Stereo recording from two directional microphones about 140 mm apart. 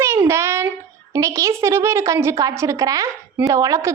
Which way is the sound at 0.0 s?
20° right (ahead or behind).